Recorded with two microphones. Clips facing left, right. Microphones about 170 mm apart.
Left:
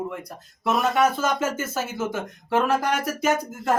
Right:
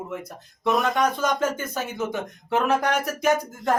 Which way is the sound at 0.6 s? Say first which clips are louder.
Left 1 dB; centre (ahead or behind).